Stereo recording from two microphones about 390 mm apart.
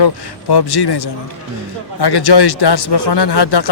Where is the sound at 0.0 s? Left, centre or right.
Left.